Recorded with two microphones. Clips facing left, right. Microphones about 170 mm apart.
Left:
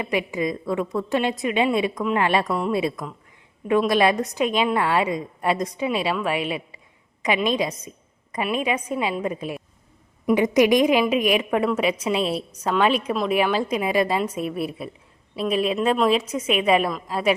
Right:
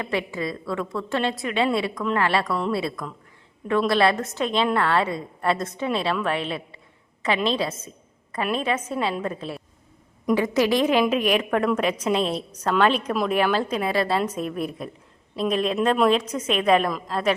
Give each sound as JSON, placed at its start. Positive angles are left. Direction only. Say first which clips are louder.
{"t": 0.0, "sound": "a woman's voice", "louder": "left 3 dB", "side_deg": 15}